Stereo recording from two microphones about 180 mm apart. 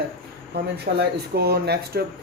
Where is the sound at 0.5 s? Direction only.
60° right (ahead or behind).